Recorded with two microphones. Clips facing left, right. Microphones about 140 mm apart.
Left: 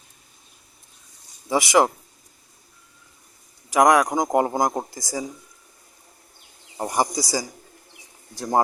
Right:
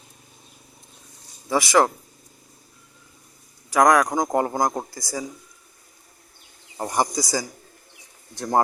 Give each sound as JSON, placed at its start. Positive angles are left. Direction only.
{"t": 1.5, "sound": "speech", "side_deg": 15}
{"t": 3.7, "sound": "speech", "side_deg": 20}
{"t": 6.7, "sound": "speech", "side_deg": 15}